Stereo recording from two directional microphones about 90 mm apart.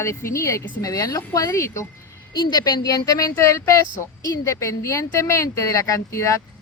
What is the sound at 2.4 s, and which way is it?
Speech, 55° left (ahead or behind).